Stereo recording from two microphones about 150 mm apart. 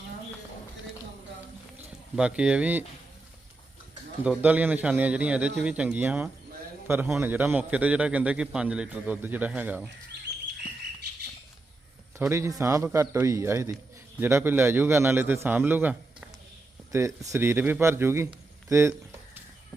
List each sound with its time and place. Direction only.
2.1 s a man's voice: 5° right (ahead or behind)
4.2 s a man's voice: 10° right (ahead or behind)
12.3 s a man's voice: 20° right (ahead or behind)